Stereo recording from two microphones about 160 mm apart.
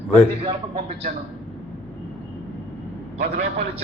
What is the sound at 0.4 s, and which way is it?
Speech, 35° right (ahead or behind).